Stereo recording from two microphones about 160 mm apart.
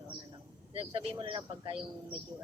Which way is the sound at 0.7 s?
35° right (ahead or behind).